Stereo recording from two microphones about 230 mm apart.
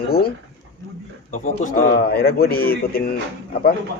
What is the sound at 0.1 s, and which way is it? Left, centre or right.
A man's voice, left.